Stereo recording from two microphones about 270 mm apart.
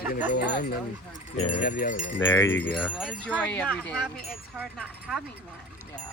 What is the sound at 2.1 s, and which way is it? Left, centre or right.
Wind chime, left.